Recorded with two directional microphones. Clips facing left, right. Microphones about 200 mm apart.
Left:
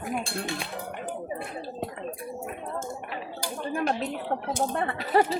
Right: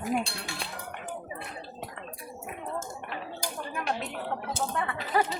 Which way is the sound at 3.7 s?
35° left (ahead or behind).